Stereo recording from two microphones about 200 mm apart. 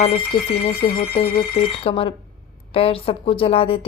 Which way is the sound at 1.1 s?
50° left (ahead or behind).